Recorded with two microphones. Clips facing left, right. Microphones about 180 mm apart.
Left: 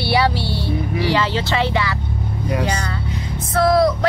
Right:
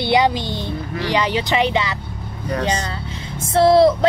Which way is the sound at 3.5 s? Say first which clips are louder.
Right 3 dB; 25° right (ahead or behind).